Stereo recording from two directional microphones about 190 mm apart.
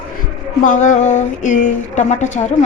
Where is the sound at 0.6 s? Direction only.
40° left (ahead or behind).